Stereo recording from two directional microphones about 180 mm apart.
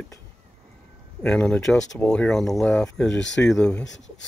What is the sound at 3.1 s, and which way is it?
Speech, 90° left.